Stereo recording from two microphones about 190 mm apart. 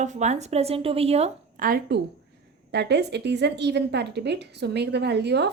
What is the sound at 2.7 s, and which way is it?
A woman's voice, 60° right (ahead or behind).